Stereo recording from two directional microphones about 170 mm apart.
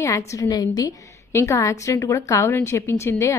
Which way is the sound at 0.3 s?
20° left (ahead or behind).